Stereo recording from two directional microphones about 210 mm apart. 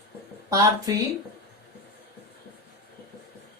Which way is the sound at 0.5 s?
15° right (ahead or behind).